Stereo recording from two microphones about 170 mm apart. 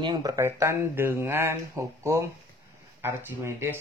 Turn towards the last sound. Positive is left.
turn(degrees=-15)  # may be behind; listen again after turning